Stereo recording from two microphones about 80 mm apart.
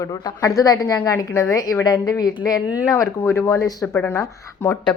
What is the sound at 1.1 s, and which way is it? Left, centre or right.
A woman's voice, left.